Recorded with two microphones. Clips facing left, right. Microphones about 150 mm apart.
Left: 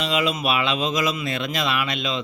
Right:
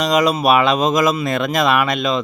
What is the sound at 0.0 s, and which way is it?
A man's voice, 40° right (ahead or behind).